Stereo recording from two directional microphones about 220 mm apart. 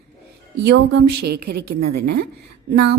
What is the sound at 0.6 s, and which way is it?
A woman's voice, 50° right (ahead or behind).